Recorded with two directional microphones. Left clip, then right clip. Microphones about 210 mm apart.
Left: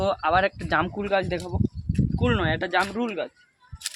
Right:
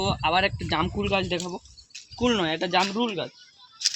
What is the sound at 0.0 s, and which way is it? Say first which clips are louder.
Speech: left 2 dB; 5° left (ahead or behind).